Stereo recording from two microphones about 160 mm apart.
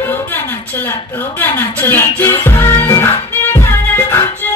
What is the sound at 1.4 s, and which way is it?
Music, 10° left (ahead or behind).